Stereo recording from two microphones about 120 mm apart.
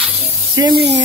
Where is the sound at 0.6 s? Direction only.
35° right (ahead or behind).